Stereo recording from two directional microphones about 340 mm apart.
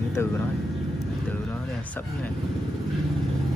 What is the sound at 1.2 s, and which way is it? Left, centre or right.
Vehicle, centre.